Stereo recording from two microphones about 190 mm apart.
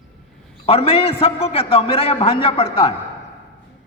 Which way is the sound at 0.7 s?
30° left (ahead or behind).